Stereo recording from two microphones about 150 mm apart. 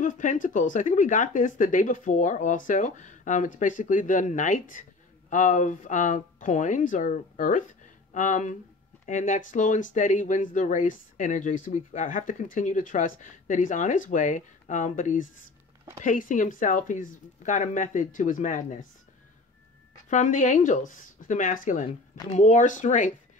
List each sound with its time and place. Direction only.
0.0 s speech: 55° left (ahead or behind)
20.1 s speech: 55° left (ahead or behind)